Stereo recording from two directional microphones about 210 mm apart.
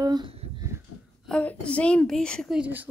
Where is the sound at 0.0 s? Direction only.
20° right (ahead or behind).